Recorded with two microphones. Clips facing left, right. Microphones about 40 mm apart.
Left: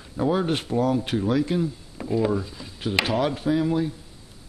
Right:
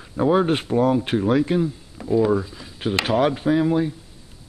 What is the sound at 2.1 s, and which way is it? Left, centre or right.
Speech, centre.